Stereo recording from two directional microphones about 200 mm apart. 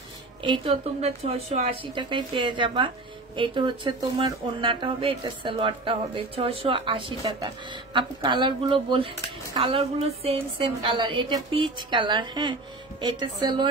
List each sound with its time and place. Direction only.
0.4 s speech: 25° right (ahead or behind)